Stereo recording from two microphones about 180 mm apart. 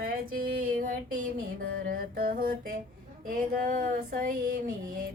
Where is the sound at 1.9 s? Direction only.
50° right (ahead or behind).